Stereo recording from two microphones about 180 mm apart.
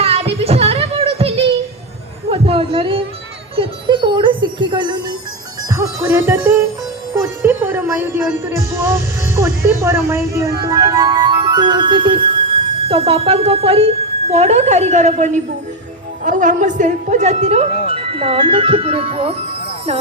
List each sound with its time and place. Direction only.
0.0 s music: 35° right (ahead or behind)
2.3 s a sound: 30° right (ahead or behind)
3.5 s music: 30° right (ahead or behind)
5.6 s speech: 15° right (ahead or behind)
7.2 s music: 10° right (ahead or behind)
10.1 s a woman's voice: 15° right (ahead or behind); by 20.0 s 35° right (ahead or behind)